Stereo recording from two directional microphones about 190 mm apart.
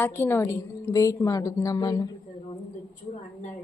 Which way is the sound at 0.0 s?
10° left (ahead or behind).